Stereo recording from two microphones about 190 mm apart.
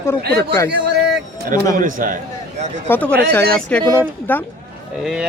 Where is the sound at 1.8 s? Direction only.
45° right (ahead or behind).